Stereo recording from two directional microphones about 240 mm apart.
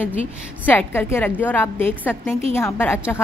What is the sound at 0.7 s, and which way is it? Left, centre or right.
A woman's voice, centre.